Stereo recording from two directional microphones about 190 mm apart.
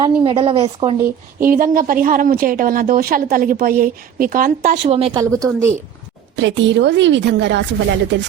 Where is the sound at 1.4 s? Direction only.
50° right (ahead or behind); by 5.1 s 30° right (ahead or behind).